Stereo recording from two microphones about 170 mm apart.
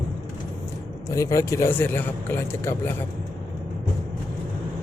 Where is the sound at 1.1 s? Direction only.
20° left (ahead or behind).